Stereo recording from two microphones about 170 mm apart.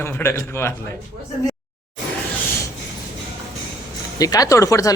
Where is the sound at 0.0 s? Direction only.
15° left (ahead or behind).